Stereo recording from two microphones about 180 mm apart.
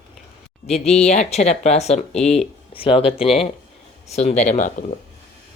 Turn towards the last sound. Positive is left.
turn(degrees=40)  # may be behind; listen again after turning